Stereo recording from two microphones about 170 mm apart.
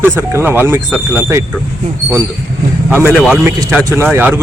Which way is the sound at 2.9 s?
10° right (ahead or behind).